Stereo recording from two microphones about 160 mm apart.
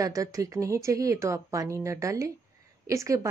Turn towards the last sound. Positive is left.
turn(degrees=-20)  # may be behind; listen again after turning